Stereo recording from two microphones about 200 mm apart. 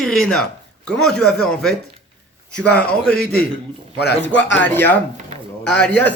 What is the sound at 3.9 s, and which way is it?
Speech, 55° left (ahead or behind).